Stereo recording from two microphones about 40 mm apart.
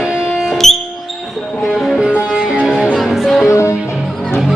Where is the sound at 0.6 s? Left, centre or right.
Centre.